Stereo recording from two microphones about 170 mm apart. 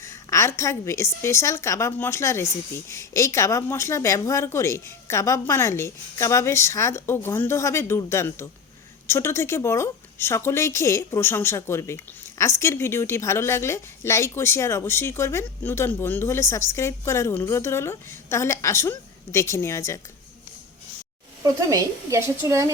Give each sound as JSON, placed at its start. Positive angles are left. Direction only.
{"t": 0.0, "sound": "a woman's voice", "side_deg": 15}
{"t": 21.4, "sound": "speech", "side_deg": -20}